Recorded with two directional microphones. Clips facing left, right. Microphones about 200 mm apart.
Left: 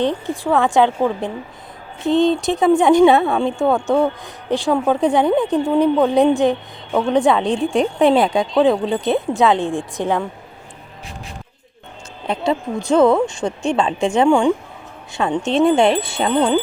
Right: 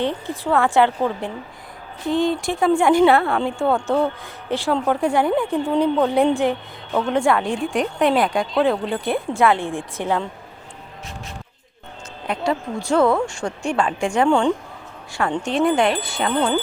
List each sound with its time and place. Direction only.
0.0 s a woman's voice: 15° left (ahead or behind)
12.3 s a woman's voice: 25° left (ahead or behind)
14.3 s speech: 10° left (ahead or behind)
15.4 s a woman's voice: 25° left (ahead or behind)